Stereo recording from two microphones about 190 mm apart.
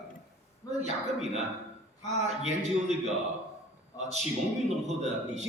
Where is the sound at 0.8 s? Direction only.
35° right (ahead or behind).